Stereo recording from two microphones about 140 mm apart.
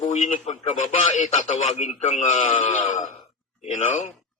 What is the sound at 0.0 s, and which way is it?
Speech, 60° left (ahead or behind).